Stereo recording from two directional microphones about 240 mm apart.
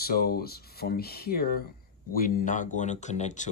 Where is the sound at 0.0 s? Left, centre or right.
Left.